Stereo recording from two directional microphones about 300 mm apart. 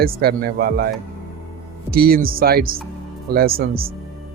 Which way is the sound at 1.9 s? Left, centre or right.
Right.